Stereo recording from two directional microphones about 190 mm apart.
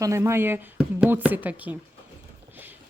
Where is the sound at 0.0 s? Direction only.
15° right (ahead or behind).